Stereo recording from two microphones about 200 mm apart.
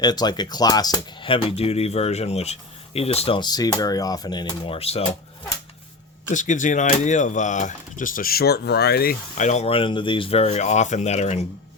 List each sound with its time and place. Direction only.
0.0 s speech: 20° left (ahead or behind)
6.3 s speech: 40° left (ahead or behind)